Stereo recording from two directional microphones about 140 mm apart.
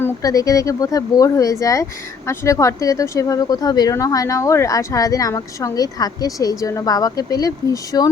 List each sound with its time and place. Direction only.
0.0 s speech: 25° left (ahead or behind)